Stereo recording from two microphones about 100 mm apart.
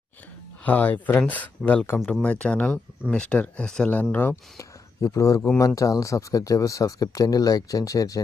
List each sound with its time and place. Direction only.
0.6 s speech: 15° left (ahead or behind)
4.5 s a sound: 35° left (ahead or behind)
5.5 s speech: 35° left (ahead or behind)